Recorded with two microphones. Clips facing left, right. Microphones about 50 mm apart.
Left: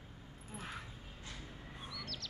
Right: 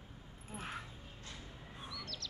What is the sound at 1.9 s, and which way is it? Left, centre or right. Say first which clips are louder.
Bird: even; left.